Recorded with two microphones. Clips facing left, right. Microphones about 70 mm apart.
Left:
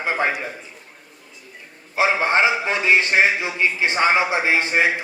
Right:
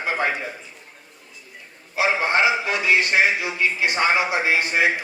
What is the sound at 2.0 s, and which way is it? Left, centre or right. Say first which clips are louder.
A man's voice: left 2 dB; left.